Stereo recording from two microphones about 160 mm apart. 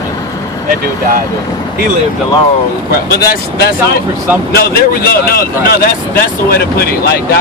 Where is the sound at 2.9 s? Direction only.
80° left.